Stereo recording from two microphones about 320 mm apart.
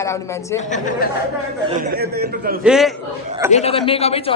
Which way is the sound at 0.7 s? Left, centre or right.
Left.